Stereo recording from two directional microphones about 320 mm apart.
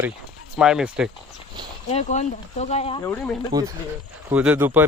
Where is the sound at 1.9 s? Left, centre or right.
Left.